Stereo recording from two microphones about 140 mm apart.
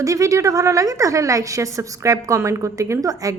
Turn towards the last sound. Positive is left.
turn(degrees=-25)  # may be behind; listen again after turning